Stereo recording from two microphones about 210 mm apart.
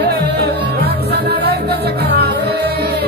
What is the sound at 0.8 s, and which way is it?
Music, 50° right (ahead or behind).